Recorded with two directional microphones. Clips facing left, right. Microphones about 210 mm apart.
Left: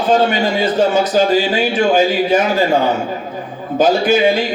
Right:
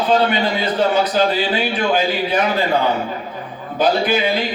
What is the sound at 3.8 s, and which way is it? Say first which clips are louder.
Speech: left 4 dB; 45° left (ahead or behind).